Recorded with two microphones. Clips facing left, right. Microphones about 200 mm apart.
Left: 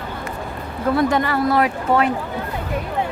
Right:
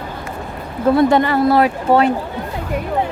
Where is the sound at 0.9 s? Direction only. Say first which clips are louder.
Right 5 dB; 25° right (ahead or behind).